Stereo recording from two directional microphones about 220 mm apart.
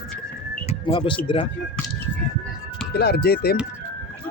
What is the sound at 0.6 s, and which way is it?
Music, 30° left (ahead or behind).